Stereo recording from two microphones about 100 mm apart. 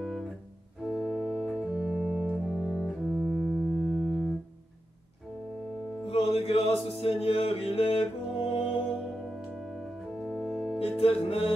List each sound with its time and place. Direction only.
0.0 s music: centre (ahead or behind)
0.8 s organ: 10° right (ahead or behind)
6.0 s music: 90° left; by 8.7 s 60° left (ahead or behind)
10.1 s organ: 10° right (ahead or behind)
10.8 s music: 70° left (ahead or behind)